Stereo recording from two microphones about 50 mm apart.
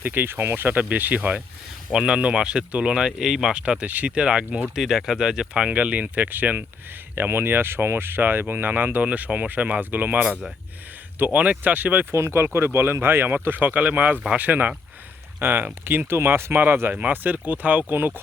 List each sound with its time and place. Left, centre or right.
0.0 s speech: right
1.9 s speech: centre
3.1 s speech: centre
3.5 s speech: centre
3.8 s speech: right
4.1 s speech: centre
4.7 s speech: centre
5.6 s speech: right
12.1 s speech: right
12.5 s speech: right
15.4 s speech: right
16.9 s speech: right